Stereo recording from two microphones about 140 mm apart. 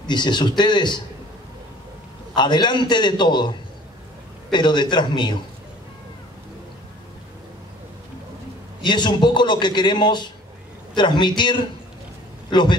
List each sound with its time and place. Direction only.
0.0 s a man's voice: 30° left (ahead or behind)
2.3 s a man's voice: 30° left (ahead or behind)
8.8 s a man's voice: 35° left (ahead or behind)